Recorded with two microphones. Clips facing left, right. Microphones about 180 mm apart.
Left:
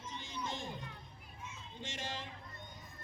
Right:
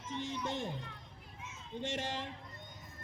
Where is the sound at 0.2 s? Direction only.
70° right (ahead or behind).